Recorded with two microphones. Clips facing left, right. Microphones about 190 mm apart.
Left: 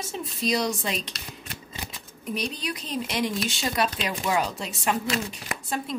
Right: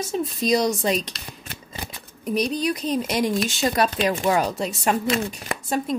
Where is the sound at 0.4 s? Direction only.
40° right (ahead or behind).